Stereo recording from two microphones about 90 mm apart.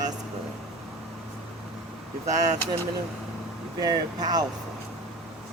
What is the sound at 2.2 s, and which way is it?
Speech, 40° right (ahead or behind).